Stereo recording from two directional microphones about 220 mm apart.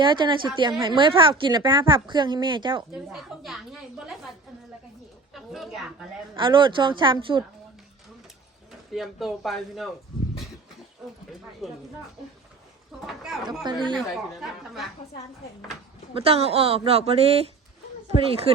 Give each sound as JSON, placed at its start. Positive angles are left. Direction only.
{"t": 0.0, "sound": "a woman's voice", "side_deg": -20}
{"t": 2.9, "sound": "a woman's voice", "side_deg": -5}
{"t": 5.3, "sound": "a sound", "side_deg": 0}
{"t": 6.3, "sound": "a woman's voice", "side_deg": -20}
{"t": 9.0, "sound": "a woman's voice", "side_deg": 0}
{"t": 11.6, "sound": "a woman's voice", "side_deg": 0}
{"t": 13.4, "sound": "a woman's voice", "side_deg": -20}
{"t": 13.9, "sound": "a woman's voice", "side_deg": 0}
{"t": 16.1, "sound": "a woman's voice", "side_deg": -25}